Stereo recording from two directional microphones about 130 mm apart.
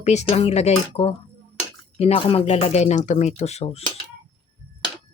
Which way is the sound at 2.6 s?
60° left (ahead or behind).